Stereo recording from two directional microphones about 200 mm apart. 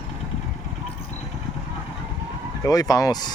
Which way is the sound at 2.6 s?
20° left (ahead or behind).